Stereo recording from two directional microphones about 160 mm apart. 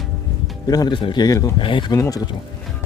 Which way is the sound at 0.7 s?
25° left (ahead or behind).